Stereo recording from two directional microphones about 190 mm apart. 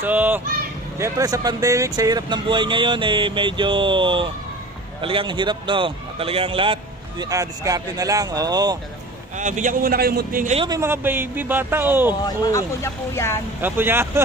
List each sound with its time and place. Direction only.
0.0 s a man's voice: 10° right (ahead or behind)
9.4 s a man's voice: 40° right (ahead or behind)
10.5 s a man's voice: 25° right (ahead or behind)
10.8 s speech: 10° right (ahead or behind)
12.3 s speech: 15° left (ahead or behind)
13.6 s speech: 10° right (ahead or behind)